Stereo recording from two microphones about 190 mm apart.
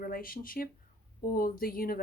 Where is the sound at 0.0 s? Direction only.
50° left (ahead or behind).